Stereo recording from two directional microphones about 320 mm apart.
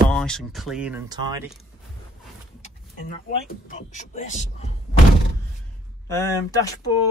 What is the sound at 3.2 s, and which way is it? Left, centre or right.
Speech, left.